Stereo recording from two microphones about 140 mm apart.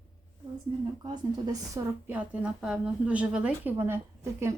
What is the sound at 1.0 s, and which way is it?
Speech, 30° right (ahead or behind).